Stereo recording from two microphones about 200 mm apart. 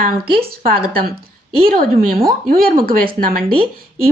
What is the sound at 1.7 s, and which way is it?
Speech, 45° right (ahead or behind).